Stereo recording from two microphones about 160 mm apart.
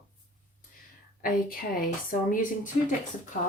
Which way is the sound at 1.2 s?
65° left (ahead or behind).